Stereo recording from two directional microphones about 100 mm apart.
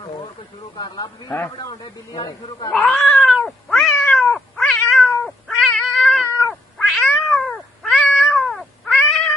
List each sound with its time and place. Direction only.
0.7 s speech: 45° left (ahead or behind)
2.7 s cat: 5° left (ahead or behind)